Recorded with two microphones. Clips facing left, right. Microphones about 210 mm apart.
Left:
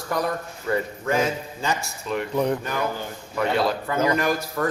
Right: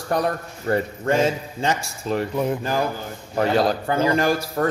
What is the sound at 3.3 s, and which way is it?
A man's voice, 35° right (ahead or behind).